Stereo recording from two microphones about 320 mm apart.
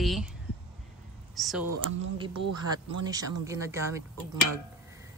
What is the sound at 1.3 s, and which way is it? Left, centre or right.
Speech, centre.